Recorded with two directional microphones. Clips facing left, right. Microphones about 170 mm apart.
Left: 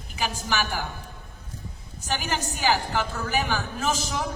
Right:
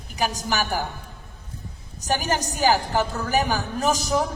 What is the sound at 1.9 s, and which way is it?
A woman's voice, 40° right (ahead or behind).